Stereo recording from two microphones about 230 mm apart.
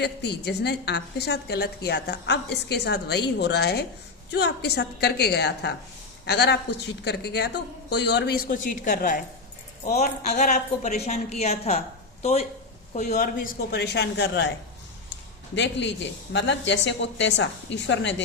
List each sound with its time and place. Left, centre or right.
0.0 s a woman's voice: left
15.5 s a woman's voice: left